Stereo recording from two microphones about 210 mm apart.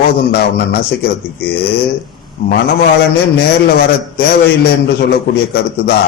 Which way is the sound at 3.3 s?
50° left (ahead or behind).